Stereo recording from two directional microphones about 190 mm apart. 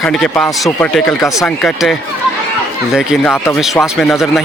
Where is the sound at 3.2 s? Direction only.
15° left (ahead or behind).